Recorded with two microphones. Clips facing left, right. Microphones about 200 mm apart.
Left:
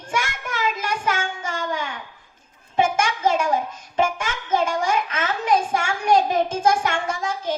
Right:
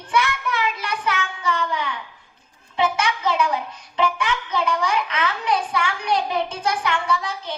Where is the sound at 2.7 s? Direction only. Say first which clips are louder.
Left 1 dB; 45° left (ahead or behind).